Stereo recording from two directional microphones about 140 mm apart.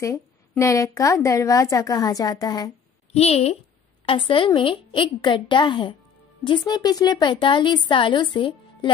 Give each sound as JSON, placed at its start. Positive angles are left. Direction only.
{"t": 0.0, "sound": "a woman's voice", "side_deg": 20}
{"t": 3.1, "sound": "a woman's voice", "side_deg": 50}